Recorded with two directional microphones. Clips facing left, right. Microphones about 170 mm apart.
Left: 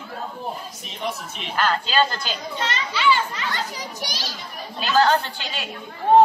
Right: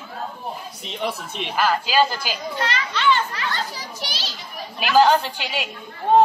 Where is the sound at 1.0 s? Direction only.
60° right (ahead or behind).